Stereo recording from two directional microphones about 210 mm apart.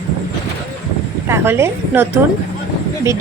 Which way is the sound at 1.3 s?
10° right (ahead or behind).